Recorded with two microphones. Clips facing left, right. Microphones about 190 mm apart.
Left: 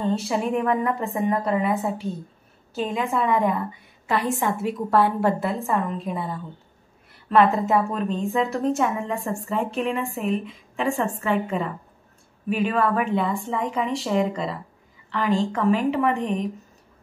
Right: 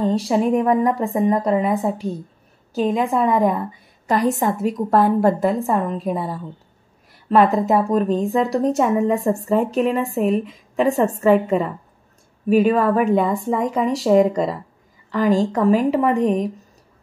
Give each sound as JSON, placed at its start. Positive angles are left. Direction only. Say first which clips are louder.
{"t": 0.1, "sound": "a woman's voice", "louder": "right 6 dB", "side_deg": -40}
{"t": 7.2, "sound": "a woman's voice", "louder": "right 3 dB", "side_deg": -40}